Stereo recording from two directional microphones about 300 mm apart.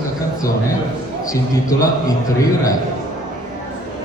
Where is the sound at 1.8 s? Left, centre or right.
Centre.